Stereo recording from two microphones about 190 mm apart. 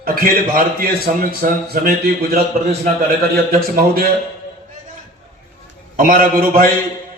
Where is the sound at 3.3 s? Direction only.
50° right (ahead or behind).